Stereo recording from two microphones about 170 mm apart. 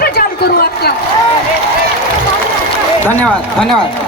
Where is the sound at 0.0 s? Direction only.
65° left (ahead or behind).